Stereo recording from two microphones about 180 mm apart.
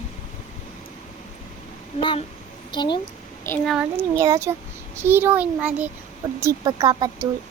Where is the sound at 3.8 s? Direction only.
15° right (ahead or behind).